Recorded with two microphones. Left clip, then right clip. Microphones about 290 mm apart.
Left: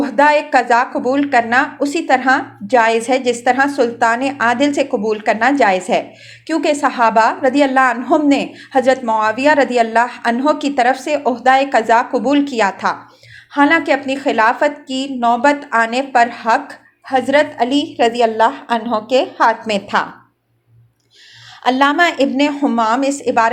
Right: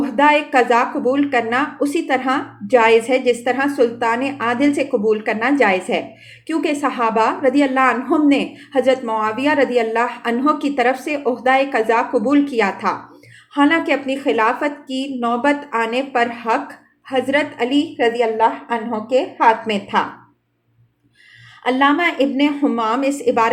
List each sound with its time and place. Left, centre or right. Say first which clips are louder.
0.0 s a woman's voice: left 2 dB; centre
21.6 s speech: left 3 dB; centre